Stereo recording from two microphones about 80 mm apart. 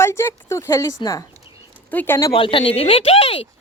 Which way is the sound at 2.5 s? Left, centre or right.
Left.